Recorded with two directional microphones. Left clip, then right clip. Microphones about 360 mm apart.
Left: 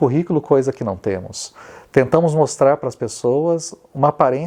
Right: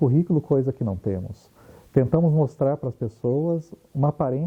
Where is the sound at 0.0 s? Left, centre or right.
Centre.